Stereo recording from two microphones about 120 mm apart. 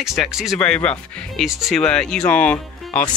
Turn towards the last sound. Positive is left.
turn(degrees=10)  # may be behind; listen again after turning